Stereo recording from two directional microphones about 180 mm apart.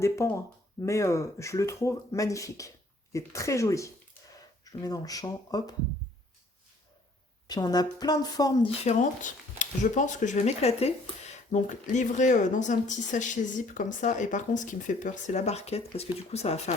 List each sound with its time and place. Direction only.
0.0 s a woman's voice: 15° left (ahead or behind)
7.4 s a woman's voice: 20° left (ahead or behind)
8.8 s speech: 40° left (ahead or behind)